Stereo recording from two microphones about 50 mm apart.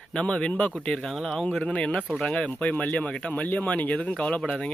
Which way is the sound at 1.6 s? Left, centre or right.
Left.